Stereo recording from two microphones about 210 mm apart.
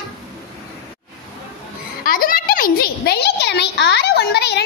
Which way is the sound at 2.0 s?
40° left (ahead or behind).